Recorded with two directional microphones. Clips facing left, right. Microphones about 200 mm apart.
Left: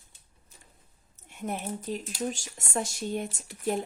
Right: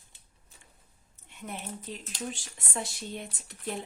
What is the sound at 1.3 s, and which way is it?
Speech, 45° left (ahead or behind).